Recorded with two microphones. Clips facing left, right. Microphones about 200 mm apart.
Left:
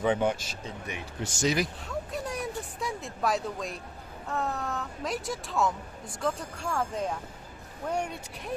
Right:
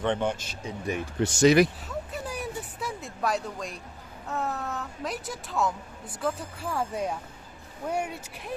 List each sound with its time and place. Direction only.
0.0 s speech: 10° left (ahead or behind)
1.2 s speech: 65° right (ahead or behind)
2.1 s speech: centre (ahead or behind)